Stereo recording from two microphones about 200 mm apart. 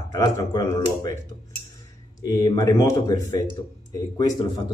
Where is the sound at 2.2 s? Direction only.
20° left (ahead or behind).